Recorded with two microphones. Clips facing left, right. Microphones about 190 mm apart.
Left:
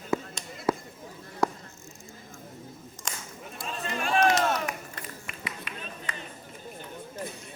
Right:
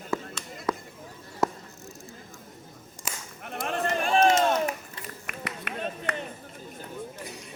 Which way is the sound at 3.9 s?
35° right (ahead or behind).